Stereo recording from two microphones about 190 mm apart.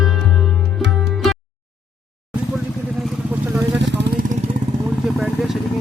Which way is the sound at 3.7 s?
70° right (ahead or behind).